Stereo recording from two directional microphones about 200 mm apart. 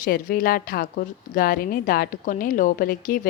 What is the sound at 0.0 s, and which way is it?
A woman's voice, 45° left (ahead or behind).